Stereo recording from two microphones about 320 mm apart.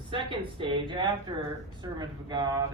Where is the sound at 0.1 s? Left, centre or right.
Centre.